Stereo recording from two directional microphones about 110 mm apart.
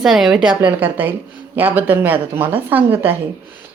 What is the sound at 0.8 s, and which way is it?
Speech, 20° right (ahead or behind).